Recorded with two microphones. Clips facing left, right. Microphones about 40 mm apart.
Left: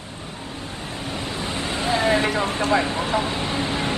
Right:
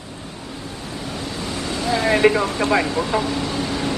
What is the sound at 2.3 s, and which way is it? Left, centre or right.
Speech, left.